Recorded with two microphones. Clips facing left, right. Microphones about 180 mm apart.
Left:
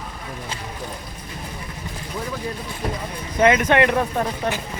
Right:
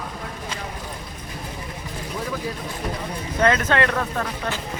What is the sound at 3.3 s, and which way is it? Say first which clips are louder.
Speech: left 3 dB; 15° left (ahead or behind).